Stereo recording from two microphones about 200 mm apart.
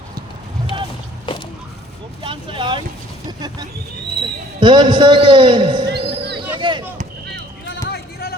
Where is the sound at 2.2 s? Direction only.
25° right (ahead or behind).